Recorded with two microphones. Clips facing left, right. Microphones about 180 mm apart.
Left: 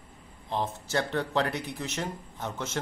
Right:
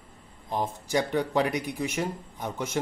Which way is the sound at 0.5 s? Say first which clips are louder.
Right 2 dB; 15° right (ahead or behind).